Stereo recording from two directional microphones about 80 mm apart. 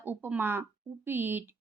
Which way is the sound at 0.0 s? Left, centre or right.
Right.